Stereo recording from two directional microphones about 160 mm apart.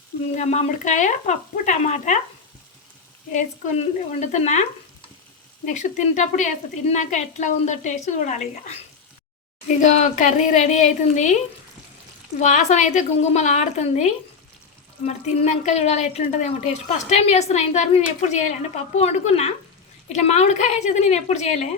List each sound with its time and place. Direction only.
0.3 s a woman's voice: 45° left (ahead or behind)
4.3 s a woman's voice: 45° left (ahead or behind)
5.6 s a woman's voice: 50° left (ahead or behind)
12.4 s a woman's voice: 45° left (ahead or behind)